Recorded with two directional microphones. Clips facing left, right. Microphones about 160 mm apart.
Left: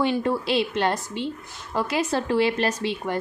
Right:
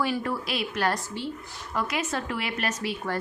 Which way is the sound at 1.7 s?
30° left (ahead or behind).